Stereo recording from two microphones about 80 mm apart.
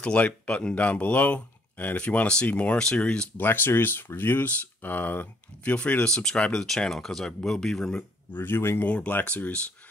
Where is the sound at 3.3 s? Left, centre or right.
Left; by 8.0 s centre.